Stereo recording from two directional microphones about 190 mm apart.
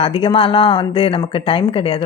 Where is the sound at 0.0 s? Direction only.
30° left (ahead or behind).